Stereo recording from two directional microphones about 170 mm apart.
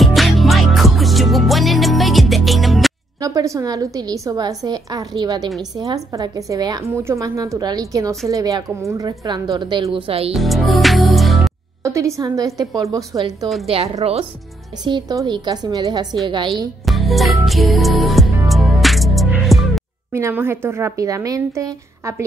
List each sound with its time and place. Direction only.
0.0 s music: centre (ahead or behind)
3.2 s a woman's voice: 20° right (ahead or behind)
10.3 s music: centre (ahead or behind)
11.8 s a woman's voice: 20° right (ahead or behind)
13.7 s a woman's voice: 35° right (ahead or behind)
16.8 s music: centre (ahead or behind)
20.1 s speech: 15° right (ahead or behind)